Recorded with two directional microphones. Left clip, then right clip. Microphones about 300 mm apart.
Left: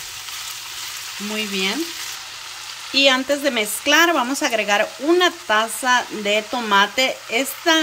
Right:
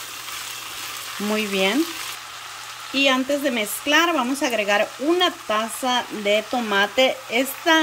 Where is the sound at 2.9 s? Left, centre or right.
Centre.